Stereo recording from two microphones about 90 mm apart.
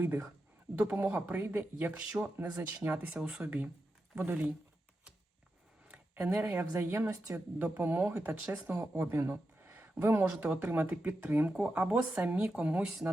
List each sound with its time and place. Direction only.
0.0 s speech: 20° right (ahead or behind)
2.0 s speech: 10° right (ahead or behind)
5.9 s speech: 15° right (ahead or behind)
9.0 s a sound: 25° right (ahead or behind)
10.0 s speech: 25° right (ahead or behind)